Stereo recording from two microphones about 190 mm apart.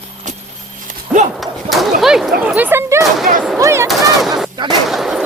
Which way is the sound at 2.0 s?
Centre (ahead or behind).